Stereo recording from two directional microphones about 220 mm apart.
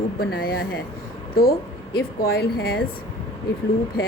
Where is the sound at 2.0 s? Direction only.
45° left (ahead or behind).